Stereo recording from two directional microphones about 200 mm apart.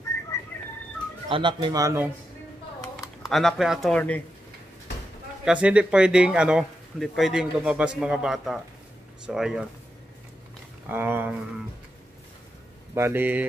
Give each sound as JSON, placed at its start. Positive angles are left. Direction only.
{"t": 0.5, "sound": "a sound", "side_deg": 10}
{"t": 1.3, "sound": "speech", "side_deg": -25}
{"t": 3.3, "sound": "speech", "side_deg": 0}
{"t": 5.4, "sound": "speech", "side_deg": -5}
{"t": 10.9, "sound": "speech", "side_deg": -10}
{"t": 12.9, "sound": "speech", "side_deg": -10}